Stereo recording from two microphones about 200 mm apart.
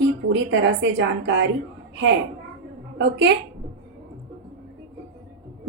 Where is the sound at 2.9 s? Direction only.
65° right (ahead or behind).